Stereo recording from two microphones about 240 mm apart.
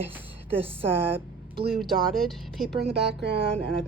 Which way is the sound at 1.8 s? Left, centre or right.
Centre.